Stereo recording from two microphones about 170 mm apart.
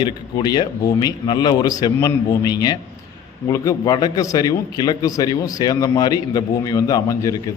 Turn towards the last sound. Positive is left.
turn(degrees=20)  # may be behind; listen again after turning